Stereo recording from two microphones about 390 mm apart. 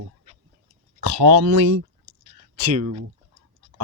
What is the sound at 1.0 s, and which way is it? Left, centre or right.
Speech, right.